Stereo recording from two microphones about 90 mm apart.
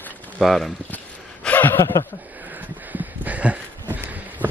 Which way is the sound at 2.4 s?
20° right (ahead or behind).